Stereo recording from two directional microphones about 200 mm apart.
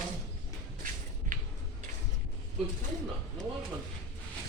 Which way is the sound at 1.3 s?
40° right (ahead or behind).